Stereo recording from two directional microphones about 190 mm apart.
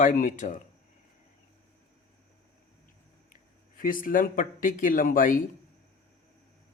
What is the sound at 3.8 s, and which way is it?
Speech, 45° left (ahead or behind).